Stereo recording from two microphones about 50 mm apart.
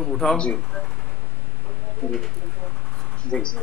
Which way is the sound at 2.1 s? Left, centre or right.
Centre.